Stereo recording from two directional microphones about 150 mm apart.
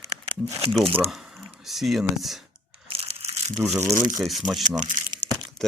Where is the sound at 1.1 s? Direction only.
Centre (ahead or behind).